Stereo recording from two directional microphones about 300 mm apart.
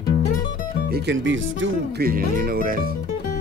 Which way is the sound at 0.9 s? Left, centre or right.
Right.